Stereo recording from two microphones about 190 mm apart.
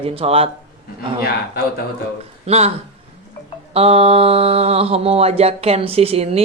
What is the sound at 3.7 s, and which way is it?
Speech, 30° right (ahead or behind).